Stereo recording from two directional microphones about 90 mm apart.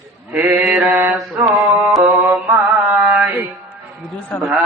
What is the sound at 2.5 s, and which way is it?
Music, 15° right (ahead or behind).